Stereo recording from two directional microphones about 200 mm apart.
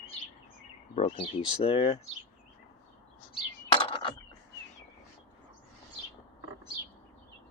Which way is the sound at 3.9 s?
25° left (ahead or behind).